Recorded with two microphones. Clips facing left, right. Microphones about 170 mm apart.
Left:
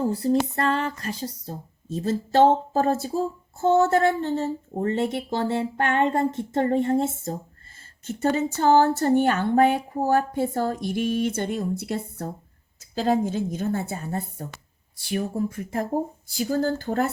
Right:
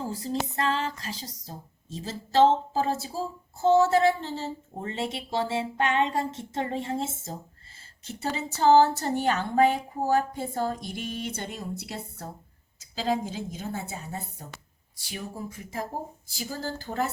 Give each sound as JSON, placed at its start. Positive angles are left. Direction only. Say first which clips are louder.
{"t": 0.0, "sound": "speech", "louder": "left 9 dB", "side_deg": 55}